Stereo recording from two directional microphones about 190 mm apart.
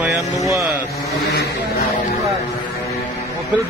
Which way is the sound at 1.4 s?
50° left (ahead or behind).